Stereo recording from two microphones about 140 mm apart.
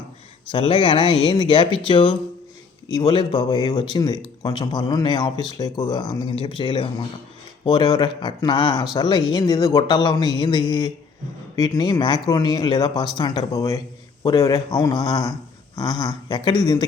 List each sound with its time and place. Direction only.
0.5 s speech: 35° left (ahead or behind)